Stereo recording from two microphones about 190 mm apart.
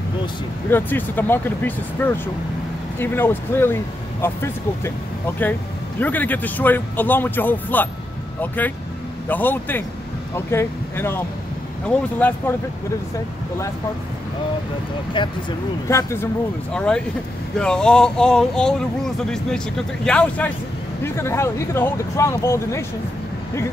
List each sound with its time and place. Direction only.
0.7 s speech: 10° left (ahead or behind)
15.2 s speech: 25° left (ahead or behind)
15.9 s speech: 15° left (ahead or behind)
16.7 s speech: 5° left (ahead or behind)